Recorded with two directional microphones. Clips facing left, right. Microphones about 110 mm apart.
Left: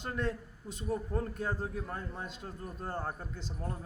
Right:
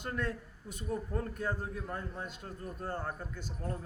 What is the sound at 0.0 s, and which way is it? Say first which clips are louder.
A man's voice: left 1 dB; 25° left (ahead or behind).